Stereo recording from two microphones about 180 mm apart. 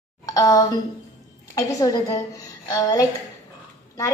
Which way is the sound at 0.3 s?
20° left (ahead or behind).